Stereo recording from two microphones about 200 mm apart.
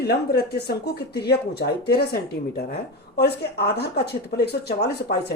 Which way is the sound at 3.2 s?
55° left (ahead or behind).